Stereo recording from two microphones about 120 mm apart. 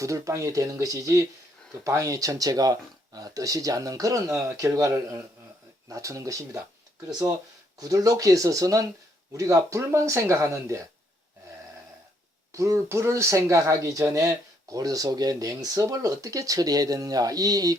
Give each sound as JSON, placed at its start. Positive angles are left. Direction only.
{"t": 0.0, "sound": "speech", "side_deg": -25}
{"t": 7.8, "sound": "speech", "side_deg": -30}
{"t": 12.5, "sound": "speech", "side_deg": -25}